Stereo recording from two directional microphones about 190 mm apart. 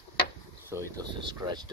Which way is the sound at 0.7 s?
15° right (ahead or behind).